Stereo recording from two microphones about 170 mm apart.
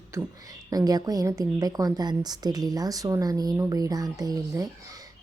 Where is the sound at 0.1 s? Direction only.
20° right (ahead or behind).